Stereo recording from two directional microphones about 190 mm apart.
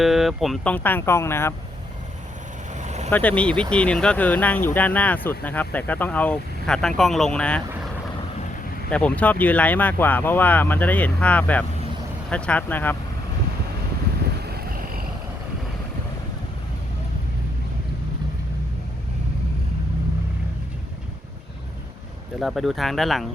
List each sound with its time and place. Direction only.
0.0 s speech: centre (ahead or behind)
2.7 s vehicle: 35° right (ahead or behind)
3.1 s speech: 10° left (ahead or behind)
8.9 s speech: 5° left (ahead or behind)
14.4 s boat: 55° right (ahead or behind)
22.4 s speech: centre (ahead or behind)